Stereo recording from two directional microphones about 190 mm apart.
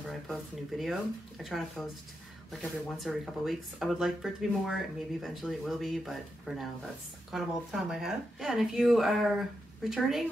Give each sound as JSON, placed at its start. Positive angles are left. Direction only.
{"t": 0.1, "sound": "speech", "side_deg": 0}